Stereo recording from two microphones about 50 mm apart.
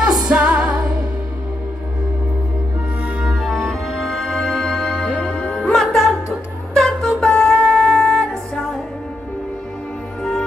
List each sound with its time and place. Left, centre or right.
0.0 s music: right
3.3 s music: centre